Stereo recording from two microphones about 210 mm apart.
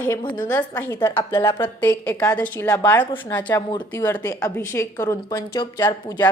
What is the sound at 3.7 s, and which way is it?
A woman's voice, 20° left (ahead or behind).